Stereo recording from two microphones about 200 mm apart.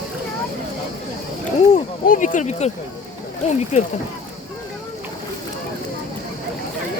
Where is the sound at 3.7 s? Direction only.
35° left (ahead or behind).